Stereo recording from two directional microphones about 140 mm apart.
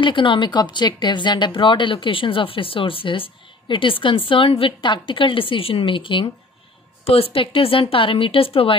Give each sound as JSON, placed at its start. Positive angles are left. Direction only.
{"t": 0.0, "sound": "speech", "side_deg": 35}